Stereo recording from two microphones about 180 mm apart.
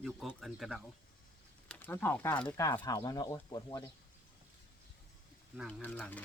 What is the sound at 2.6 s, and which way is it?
Speech, 20° left (ahead or behind).